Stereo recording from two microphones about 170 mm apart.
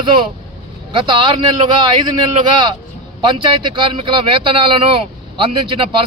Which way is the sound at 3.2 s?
30° right (ahead or behind).